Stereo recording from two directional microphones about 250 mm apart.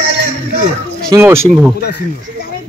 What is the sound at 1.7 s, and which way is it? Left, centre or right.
Speech, left.